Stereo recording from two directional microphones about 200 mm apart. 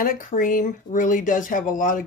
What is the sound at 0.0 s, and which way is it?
Speech, 40° left (ahead or behind).